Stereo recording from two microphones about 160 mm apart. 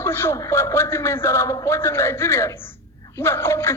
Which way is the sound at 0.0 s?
15° left (ahead or behind).